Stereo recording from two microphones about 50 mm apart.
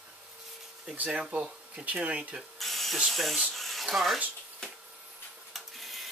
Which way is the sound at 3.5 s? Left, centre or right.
Centre.